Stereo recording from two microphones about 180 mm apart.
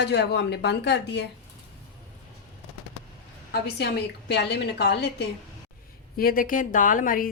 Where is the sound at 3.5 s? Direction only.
65° left (ahead or behind).